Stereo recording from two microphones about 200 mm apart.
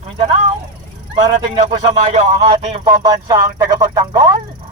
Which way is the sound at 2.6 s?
25° right (ahead or behind).